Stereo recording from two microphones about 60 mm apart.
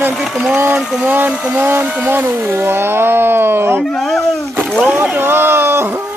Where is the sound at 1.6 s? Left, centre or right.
Right.